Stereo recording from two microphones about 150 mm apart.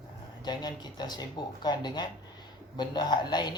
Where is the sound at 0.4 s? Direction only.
30° left (ahead or behind).